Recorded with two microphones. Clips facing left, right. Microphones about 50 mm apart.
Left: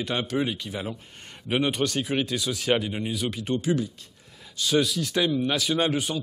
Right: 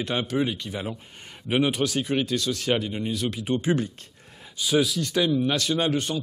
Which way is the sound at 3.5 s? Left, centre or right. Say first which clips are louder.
Right 1 dB; right.